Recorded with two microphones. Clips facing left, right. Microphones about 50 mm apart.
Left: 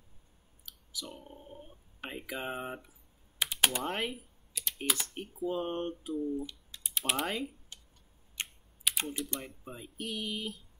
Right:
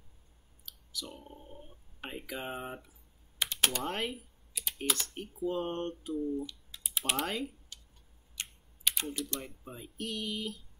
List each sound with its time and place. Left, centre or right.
0.7 s a sound: centre
3.3 s speech: centre
6.7 s typing: centre
8.4 s computer keyboard: left
8.9 s typing: centre
9.4 s speech: centre